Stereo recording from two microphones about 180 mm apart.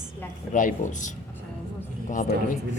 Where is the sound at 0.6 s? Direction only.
45° left (ahead or behind).